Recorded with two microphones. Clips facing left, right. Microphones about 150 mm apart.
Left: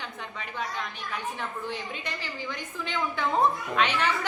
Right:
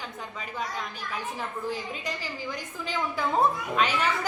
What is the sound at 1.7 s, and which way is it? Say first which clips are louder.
A woman's voice: right 2 dB; 35° right (ahead or behind).